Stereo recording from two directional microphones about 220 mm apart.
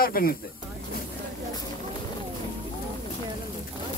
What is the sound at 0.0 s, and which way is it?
Speech, 40° left (ahead or behind).